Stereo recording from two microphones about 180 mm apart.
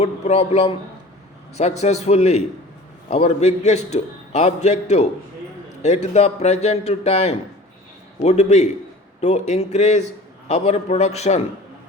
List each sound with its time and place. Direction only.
0.0 s a man's voice: 35° left (ahead or behind)